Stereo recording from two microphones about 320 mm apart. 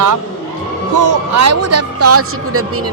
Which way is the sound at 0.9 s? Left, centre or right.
Right.